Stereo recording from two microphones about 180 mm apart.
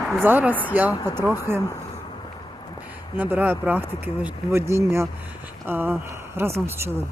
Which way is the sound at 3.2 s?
10° right (ahead or behind).